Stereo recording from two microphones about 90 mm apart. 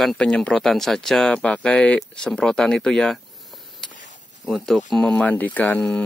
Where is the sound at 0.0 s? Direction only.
5° left (ahead or behind).